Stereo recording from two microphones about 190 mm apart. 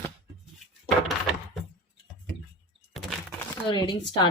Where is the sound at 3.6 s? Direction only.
25° left (ahead or behind).